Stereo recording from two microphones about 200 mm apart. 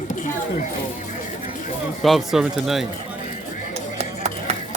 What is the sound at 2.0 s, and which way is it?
Speech, centre (ahead or behind).